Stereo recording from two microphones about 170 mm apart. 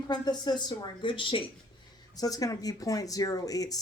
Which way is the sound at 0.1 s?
25° left (ahead or behind).